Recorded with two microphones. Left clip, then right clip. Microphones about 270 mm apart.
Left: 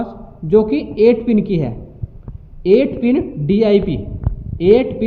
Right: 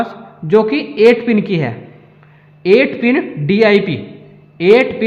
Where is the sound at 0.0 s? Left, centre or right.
Right.